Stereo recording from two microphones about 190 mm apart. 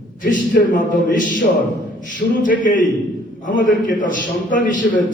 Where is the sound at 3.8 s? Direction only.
45° left (ahead or behind).